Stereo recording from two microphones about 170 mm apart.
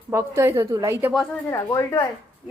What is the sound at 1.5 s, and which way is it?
Speech, 20° left (ahead or behind).